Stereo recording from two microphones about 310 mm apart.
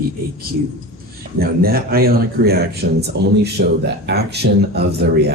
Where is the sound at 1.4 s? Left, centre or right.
Right.